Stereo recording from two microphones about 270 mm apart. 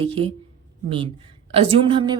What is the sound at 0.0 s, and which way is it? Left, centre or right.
A woman's voice, centre.